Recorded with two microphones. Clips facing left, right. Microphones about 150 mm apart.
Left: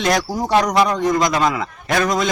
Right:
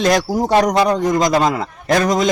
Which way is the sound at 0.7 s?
30° right (ahead or behind).